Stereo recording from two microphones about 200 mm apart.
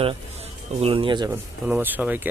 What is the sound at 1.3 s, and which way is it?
Speech, 10° right (ahead or behind).